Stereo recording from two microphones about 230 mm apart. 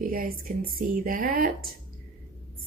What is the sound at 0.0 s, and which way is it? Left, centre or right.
Speech, right.